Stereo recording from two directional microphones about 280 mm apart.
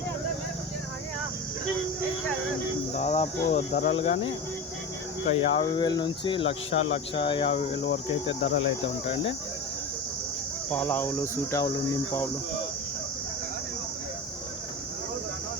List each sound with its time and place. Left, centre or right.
2.9 s speech: left
8.4 s cricket: left
10.7 s speech: centre